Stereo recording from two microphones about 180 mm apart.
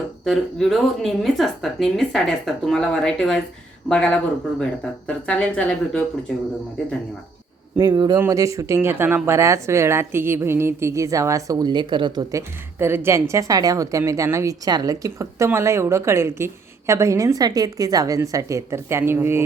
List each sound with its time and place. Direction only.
0.3 s speech: centre (ahead or behind)
7.8 s speech: 25° right (ahead or behind)